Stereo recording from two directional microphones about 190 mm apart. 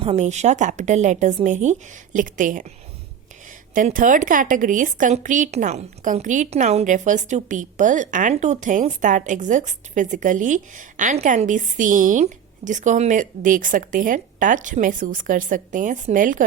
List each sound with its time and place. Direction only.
0.0 s a woman's voice: 35° right (ahead or behind)
3.8 s a woman's voice: 45° right (ahead or behind)